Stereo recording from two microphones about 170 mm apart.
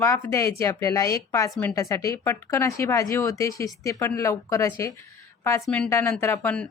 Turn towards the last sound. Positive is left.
turn(degrees=5)  # may be behind; listen again after turning